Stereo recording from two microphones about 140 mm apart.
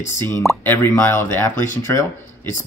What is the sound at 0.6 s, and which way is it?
Speech, 15° left (ahead or behind).